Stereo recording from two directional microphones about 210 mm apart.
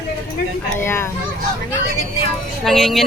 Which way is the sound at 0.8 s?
10° left (ahead or behind).